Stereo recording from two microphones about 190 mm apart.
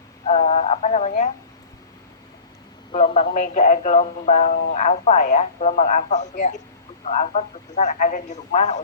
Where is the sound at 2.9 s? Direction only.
35° left (ahead or behind).